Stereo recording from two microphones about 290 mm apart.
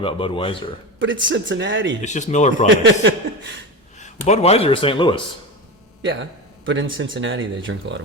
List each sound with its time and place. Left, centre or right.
0.0 s speech: centre
0.9 s speech: right
2.0 s speech: left
2.6 s speech: right
3.9 s a man's voice: left
6.0 s speech: right